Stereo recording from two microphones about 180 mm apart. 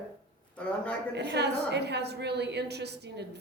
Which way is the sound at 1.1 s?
70° right (ahead or behind).